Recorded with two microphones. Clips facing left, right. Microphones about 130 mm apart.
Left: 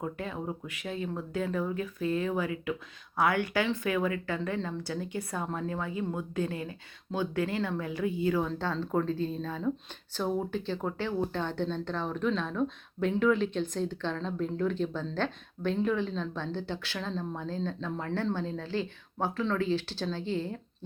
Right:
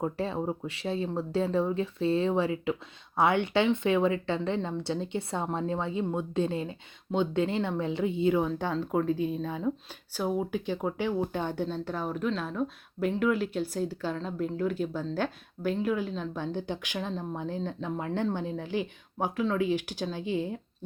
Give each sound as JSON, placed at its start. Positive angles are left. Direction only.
{"t": 0.0, "sound": "a woman's voice", "side_deg": -30}